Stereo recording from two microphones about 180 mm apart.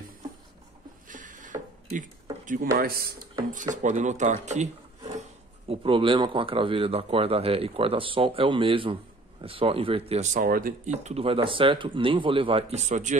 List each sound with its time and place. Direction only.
1.0 s a sound: 45° right (ahead or behind)
2.4 s speech: 50° right (ahead or behind)
3.7 s speech: 40° right (ahead or behind)
5.7 s speech: 30° right (ahead or behind)